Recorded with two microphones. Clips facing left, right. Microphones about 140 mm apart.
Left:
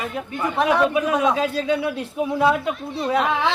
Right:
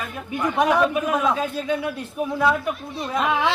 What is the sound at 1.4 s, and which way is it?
Speech, 90° left.